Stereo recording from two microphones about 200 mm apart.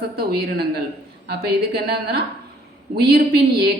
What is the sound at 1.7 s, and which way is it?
Speech, 50° right (ahead or behind).